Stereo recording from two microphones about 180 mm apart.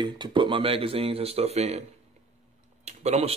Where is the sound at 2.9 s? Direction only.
35° right (ahead or behind).